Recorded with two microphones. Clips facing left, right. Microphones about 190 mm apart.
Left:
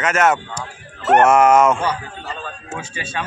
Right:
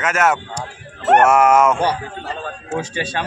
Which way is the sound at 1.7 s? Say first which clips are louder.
Right 3 dB; 35° right (ahead or behind).